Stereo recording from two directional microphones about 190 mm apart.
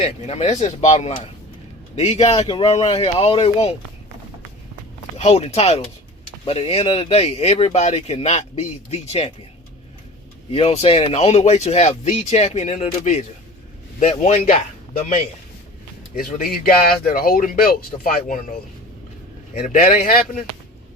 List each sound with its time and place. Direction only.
0.0 s speech: 35° left (ahead or behind)
5.1 s speech: 35° left (ahead or behind)
10.5 s speech: 30° left (ahead or behind)
16.1 s speech: 50° left (ahead or behind)
19.5 s speech: 45° left (ahead or behind)